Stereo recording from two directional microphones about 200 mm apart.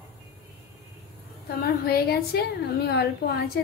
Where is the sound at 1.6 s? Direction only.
50° left (ahead or behind).